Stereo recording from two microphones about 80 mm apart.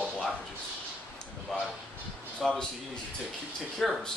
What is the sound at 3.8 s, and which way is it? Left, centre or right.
Speech, centre.